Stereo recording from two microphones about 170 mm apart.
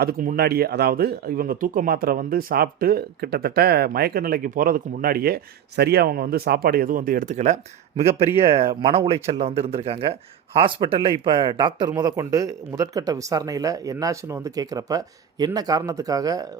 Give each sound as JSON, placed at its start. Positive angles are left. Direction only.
{"t": 0.0, "sound": "speech", "side_deg": -65}